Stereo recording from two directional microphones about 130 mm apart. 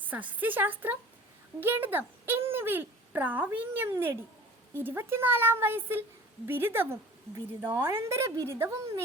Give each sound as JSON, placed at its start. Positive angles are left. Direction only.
{"t": 0.0, "sound": "a woman's voice", "side_deg": -15}